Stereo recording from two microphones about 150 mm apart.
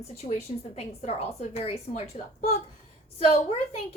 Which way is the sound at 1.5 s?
45° left (ahead or behind).